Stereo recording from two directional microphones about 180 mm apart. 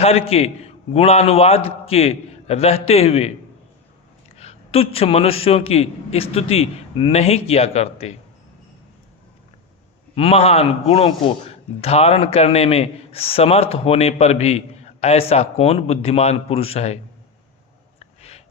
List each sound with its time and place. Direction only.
0.0 s a man's voice: 35° left (ahead or behind)
4.4 s a man's voice: 35° left (ahead or behind)
10.2 s a man's voice: 35° left (ahead or behind)
18.0 s a sound: 35° left (ahead or behind)